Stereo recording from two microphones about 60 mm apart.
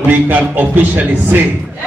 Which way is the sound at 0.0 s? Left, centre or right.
Right.